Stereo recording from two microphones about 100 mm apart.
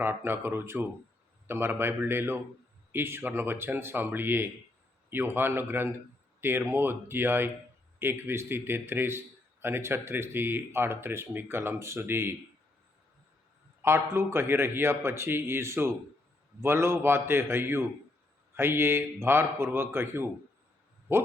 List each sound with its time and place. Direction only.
0.0 s a man's voice: 25° right (ahead or behind)
13.8 s a man's voice: 25° right (ahead or behind)